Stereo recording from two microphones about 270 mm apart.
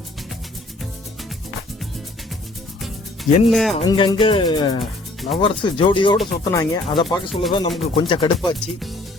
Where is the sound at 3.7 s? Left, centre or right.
Centre.